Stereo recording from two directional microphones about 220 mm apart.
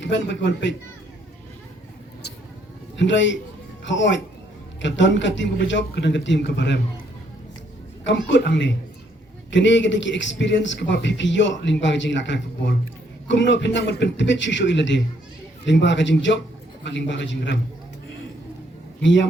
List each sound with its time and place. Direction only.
0.0 s a man's voice: 55° left (ahead or behind)
2.9 s a man's voice: 55° left (ahead or behind)
8.0 s a man's voice: 55° left (ahead or behind)
19.0 s a man's voice: 55° left (ahead or behind)